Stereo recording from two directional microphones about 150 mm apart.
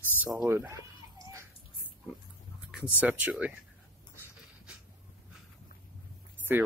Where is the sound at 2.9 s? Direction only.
10° right (ahead or behind).